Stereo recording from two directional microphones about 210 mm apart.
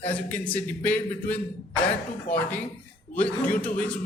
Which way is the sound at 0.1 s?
5° left (ahead or behind).